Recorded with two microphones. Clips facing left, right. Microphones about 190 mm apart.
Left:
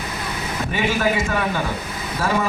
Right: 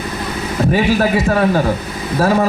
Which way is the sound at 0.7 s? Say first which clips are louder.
Right 6 dB; 40° right (ahead or behind).